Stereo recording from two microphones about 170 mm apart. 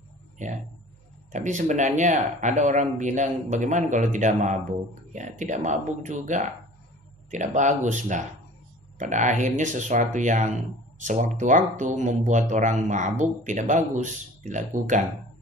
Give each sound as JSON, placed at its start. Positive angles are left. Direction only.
{"t": 0.4, "sound": "speech", "side_deg": -45}